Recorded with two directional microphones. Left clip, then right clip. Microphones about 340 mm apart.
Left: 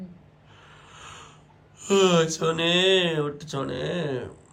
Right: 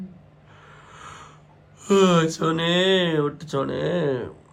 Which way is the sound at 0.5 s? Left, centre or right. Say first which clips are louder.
Right 2 dB; centre.